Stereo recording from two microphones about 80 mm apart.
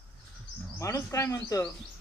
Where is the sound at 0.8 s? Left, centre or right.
Left.